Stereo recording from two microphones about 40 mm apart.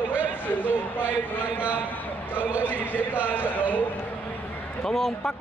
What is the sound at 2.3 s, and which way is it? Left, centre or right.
Speech, right.